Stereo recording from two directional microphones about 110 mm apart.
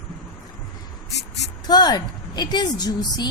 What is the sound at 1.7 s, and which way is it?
A woman's voice, 40° left (ahead or behind).